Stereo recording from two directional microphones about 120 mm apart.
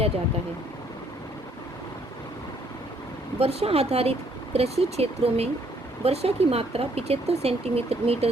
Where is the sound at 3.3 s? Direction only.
55° right (ahead or behind).